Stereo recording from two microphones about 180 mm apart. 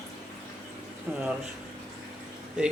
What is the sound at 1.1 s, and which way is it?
Speech, 10° right (ahead or behind).